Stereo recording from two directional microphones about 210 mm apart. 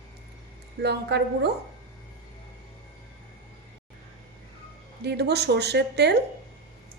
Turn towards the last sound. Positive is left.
turn(degrees=-50)  # may be behind; listen again after turning